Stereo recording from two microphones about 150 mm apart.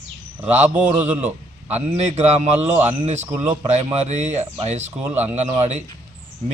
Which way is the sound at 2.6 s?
15° right (ahead or behind).